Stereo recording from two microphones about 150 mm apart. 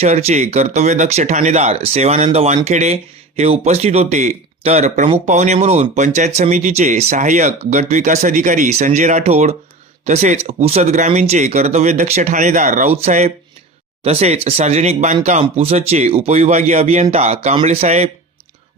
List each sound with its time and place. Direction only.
0.0 s speech: 45° right (ahead or behind)